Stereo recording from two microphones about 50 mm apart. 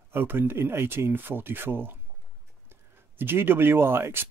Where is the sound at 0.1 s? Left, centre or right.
Right.